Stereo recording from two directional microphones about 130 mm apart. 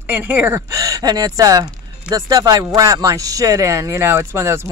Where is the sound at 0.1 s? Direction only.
15° right (ahead or behind).